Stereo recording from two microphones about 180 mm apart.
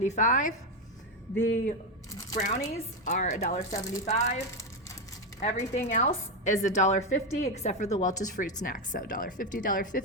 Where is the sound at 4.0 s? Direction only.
40° left (ahead or behind).